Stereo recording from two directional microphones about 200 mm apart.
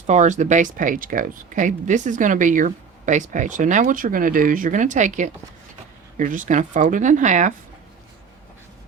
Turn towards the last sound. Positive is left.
turn(degrees=-35)  # may be behind; listen again after turning